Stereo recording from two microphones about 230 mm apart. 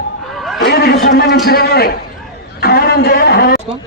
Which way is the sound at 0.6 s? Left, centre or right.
Left.